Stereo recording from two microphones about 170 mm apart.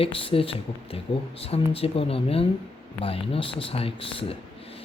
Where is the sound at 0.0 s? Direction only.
30° left (ahead or behind).